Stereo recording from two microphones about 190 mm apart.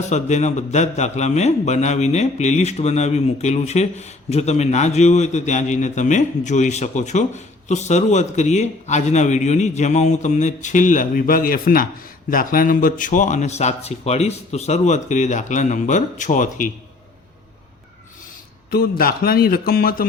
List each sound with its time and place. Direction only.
0.1 s a man's voice: 40° left (ahead or behind)
18.7 s speech: 55° left (ahead or behind)